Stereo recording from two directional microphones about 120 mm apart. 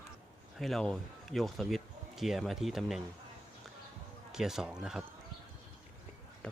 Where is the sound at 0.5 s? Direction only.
Centre (ahead or behind).